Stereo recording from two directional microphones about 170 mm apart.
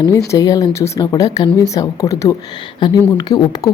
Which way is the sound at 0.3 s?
20° left (ahead or behind).